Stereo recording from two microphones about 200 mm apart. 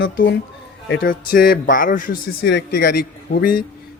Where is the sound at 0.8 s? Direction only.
45° left (ahead or behind).